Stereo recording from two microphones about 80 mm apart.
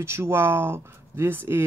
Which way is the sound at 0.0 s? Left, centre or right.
Right.